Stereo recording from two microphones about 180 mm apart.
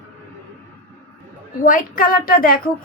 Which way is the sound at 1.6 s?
50° left (ahead or behind).